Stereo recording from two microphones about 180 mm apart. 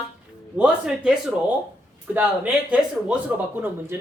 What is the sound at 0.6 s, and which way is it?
Speech, 5° right (ahead or behind).